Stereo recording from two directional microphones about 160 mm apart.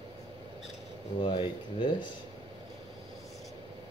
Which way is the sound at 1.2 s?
30° left (ahead or behind).